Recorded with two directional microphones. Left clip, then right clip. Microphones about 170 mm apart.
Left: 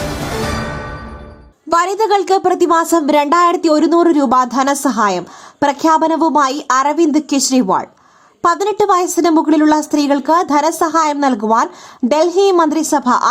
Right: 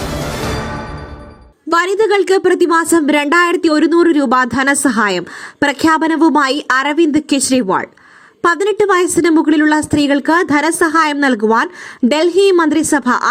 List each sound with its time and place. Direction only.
1.7 s a woman's voice: 20° right (ahead or behind)
12.9 s speech: 40° right (ahead or behind)